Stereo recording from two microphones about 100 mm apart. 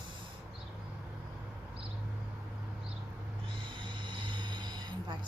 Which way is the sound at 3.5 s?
55° right (ahead or behind).